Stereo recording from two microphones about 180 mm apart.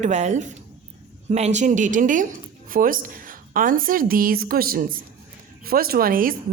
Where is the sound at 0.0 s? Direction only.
40° right (ahead or behind).